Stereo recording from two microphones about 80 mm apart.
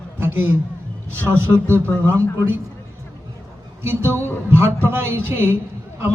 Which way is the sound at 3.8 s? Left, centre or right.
Right.